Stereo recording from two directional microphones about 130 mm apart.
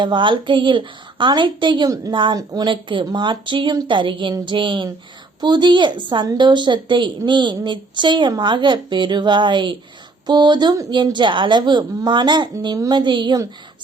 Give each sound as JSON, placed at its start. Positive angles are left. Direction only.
{"t": 0.0, "sound": "a woman's voice", "side_deg": -40}